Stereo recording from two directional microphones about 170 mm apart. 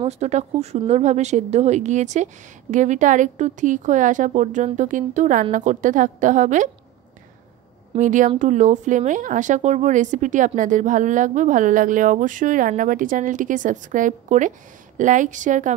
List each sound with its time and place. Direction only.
0.0 s speech: 40° right (ahead or behind)
8.0 s speech: 50° right (ahead or behind)